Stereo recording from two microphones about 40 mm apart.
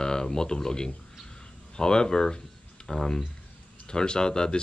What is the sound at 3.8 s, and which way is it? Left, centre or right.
Speech, centre.